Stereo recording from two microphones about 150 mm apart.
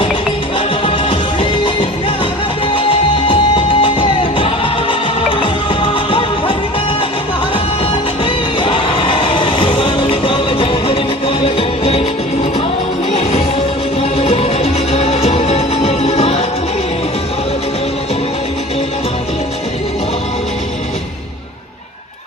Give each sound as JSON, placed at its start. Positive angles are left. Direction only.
{"t": 0.9, "sound": "music", "side_deg": 35}
{"t": 8.2, "sound": "music", "side_deg": 35}
{"t": 14.2, "sound": "music", "side_deg": 40}